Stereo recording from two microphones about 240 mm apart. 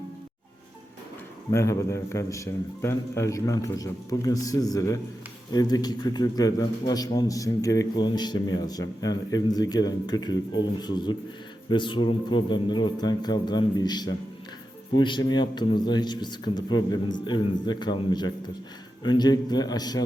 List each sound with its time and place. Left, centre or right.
1.5 s a man's voice: centre